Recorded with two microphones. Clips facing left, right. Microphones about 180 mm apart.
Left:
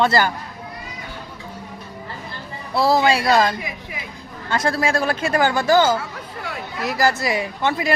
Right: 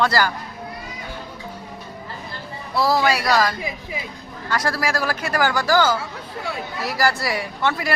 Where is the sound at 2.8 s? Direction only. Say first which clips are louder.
Left 2 dB; 25° left (ahead or behind).